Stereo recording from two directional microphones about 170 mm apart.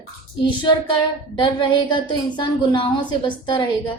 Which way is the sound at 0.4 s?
30° left (ahead or behind).